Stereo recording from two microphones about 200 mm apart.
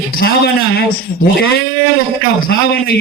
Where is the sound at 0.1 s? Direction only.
50° left (ahead or behind).